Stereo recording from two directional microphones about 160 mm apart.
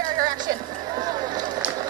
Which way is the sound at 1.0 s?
25° right (ahead or behind).